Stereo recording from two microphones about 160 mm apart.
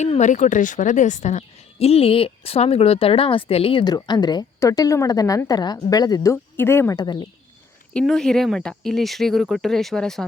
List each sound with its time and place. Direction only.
0.0 s a woman's voice: 45° left (ahead or behind); by 7.3 s 25° left (ahead or behind)
7.9 s speech: 5° left (ahead or behind)